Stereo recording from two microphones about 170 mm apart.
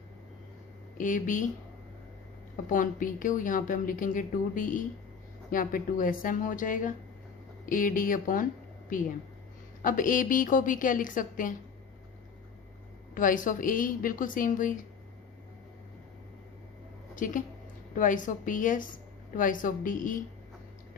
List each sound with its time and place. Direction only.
0.9 s a woman's voice: 50° left (ahead or behind)
2.6 s a woman's voice: 50° left (ahead or behind)
9.8 s a woman's voice: 50° left (ahead or behind)
13.1 s a woman's voice: 50° left (ahead or behind)
17.2 s a woman's voice: 50° left (ahead or behind)